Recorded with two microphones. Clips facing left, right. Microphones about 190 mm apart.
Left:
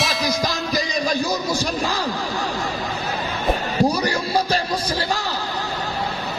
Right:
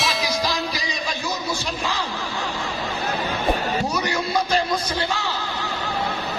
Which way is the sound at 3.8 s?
35° left (ahead or behind).